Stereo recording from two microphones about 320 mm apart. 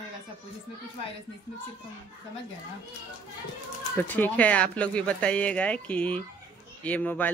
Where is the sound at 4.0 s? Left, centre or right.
Centre.